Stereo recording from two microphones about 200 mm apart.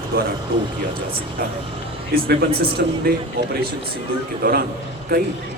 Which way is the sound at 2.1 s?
50° right (ahead or behind).